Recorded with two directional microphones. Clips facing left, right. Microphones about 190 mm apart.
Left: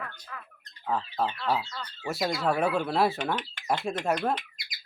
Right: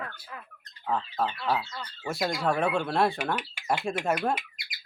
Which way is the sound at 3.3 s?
10° right (ahead or behind).